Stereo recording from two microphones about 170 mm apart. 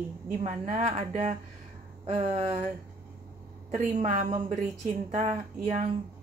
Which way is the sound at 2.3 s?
45° right (ahead or behind).